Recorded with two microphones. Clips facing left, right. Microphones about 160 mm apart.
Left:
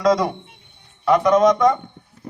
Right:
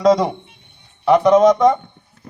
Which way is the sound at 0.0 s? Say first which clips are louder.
Right 3 dB; 25° right (ahead or behind).